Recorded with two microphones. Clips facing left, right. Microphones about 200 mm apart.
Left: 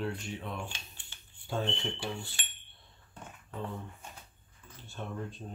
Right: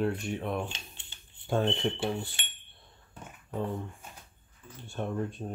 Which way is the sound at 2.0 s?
20° right (ahead or behind).